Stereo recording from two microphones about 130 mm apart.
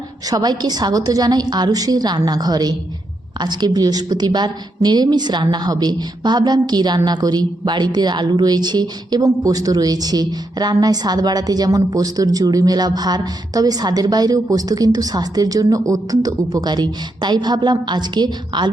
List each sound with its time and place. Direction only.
0.3 s a woman's voice: 30° right (ahead or behind)